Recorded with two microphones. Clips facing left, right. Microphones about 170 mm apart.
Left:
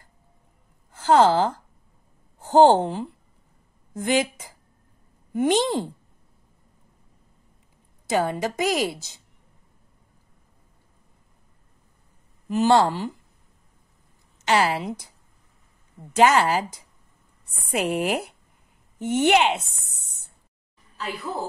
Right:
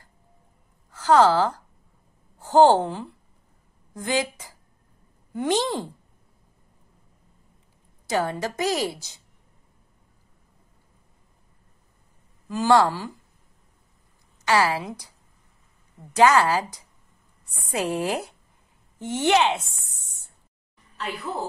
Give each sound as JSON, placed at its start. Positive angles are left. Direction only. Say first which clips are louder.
{"t": 0.9, "sound": "a woman's voice", "louder": "even", "side_deg": 25}
{"t": 8.1, "sound": "a woman's voice", "louder": "left 2 dB", "side_deg": 20}
{"t": 12.4, "sound": "a woman's voice", "louder": "left 1 dB", "side_deg": 20}
{"t": 14.4, "sound": "a woman's voice", "louder": "even", "side_deg": 20}
{"t": 16.2, "sound": "a woman's voice", "louder": "even", "side_deg": 20}